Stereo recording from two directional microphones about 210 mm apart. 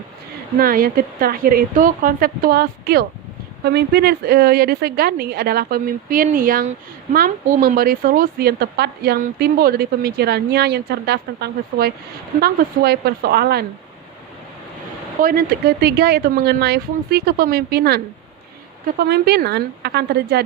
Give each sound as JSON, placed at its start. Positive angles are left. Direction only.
{"t": 0.6, "sound": "speech", "side_deg": -45}
{"t": 15.2, "sound": "speech", "side_deg": -45}